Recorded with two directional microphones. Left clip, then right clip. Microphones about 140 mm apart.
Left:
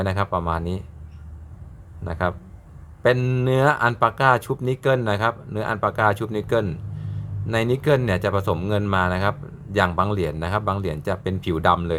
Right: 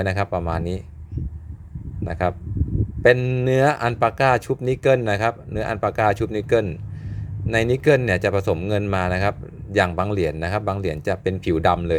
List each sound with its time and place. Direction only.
0.0 s speech: 25° right (ahead or behind)
2.0 s speech: 30° right (ahead or behind)
3.2 s speech: 10° right (ahead or behind)
3.4 s speech: 25° right (ahead or behind)